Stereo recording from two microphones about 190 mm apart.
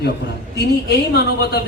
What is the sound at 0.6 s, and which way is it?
Speech, 60° left (ahead or behind).